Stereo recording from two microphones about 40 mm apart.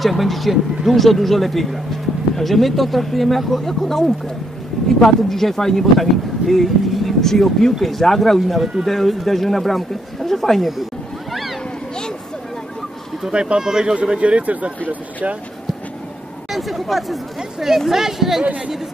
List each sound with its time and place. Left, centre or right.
0.0 s speech: centre
13.3 s speech: right
13.9 s speech: right
16.5 s speech: centre